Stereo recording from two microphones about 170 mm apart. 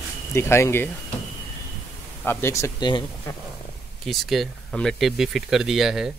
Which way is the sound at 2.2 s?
15° left (ahead or behind).